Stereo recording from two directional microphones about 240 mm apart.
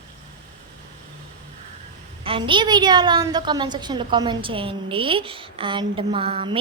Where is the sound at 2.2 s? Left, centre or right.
Right.